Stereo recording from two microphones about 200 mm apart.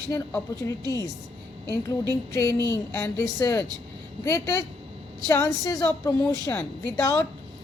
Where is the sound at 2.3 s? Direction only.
15° left (ahead or behind).